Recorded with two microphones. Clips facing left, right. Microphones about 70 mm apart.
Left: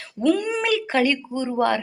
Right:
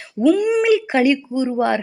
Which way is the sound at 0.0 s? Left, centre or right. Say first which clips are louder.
Right 5 dB; centre.